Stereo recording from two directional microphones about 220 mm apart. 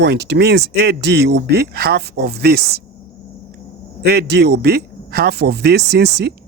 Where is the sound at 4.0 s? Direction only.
50° right (ahead or behind).